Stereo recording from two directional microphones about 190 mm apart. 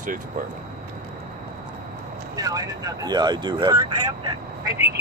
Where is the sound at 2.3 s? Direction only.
20° right (ahead or behind).